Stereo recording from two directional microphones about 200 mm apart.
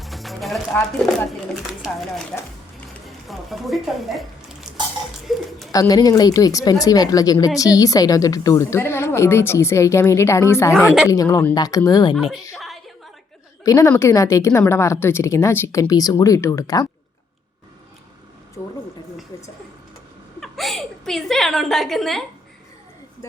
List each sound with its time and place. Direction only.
0.0 s music: centre (ahead or behind)
1.8 s speech: centre (ahead or behind)
3.2 s speech: centre (ahead or behind)
5.7 s a woman's voice: 20° left (ahead or behind)
12.1 s speech: centre (ahead or behind)
12.5 s a sound: centre (ahead or behind)
13.7 s a woman's voice: 15° left (ahead or behind)
20.4 s a woman's voice: centre (ahead or behind)